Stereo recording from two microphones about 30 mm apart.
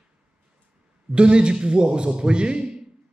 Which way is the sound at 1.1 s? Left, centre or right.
Right.